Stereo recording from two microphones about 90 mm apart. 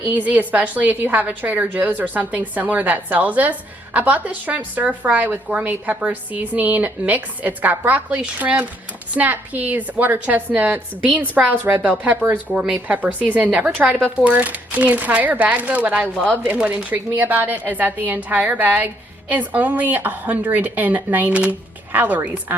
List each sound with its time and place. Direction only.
0.0 s a woman's voice: 20° right (ahead or behind)
16.1 s a woman's voice: 10° left (ahead or behind)
16.5 s a woman's voice: 15° right (ahead or behind)